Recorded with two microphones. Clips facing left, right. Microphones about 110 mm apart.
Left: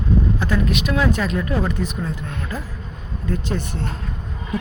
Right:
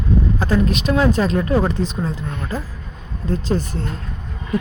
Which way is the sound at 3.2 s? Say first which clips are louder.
Right 4 dB; 35° right (ahead or behind).